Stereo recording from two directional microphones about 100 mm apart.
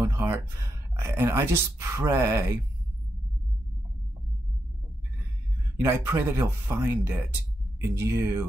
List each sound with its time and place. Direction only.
0.0 s speech: 25° right (ahead or behind)
5.8 s speech: 20° right (ahead or behind)